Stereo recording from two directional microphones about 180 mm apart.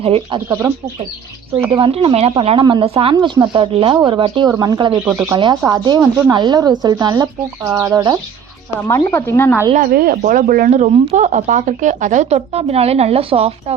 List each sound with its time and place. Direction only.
0.0 s speech: 30° right (ahead or behind)
0.4 s speech: 15° right (ahead or behind)
1.7 s speech: 30° right (ahead or behind)
8.9 s speech: 15° left (ahead or behind)
9.7 s speech: 55° right (ahead or behind); by 13.7 s 35° right (ahead or behind)